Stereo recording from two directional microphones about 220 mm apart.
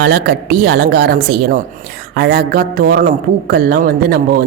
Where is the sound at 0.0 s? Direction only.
45° right (ahead or behind).